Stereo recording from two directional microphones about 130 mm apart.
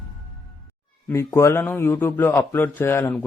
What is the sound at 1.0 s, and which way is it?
Speech, 20° left (ahead or behind).